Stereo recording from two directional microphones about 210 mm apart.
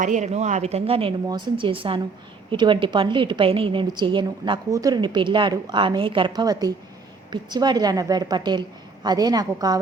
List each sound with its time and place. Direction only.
0.0 s a woman's voice: 35° right (ahead or behind); by 9.8 s 20° right (ahead or behind)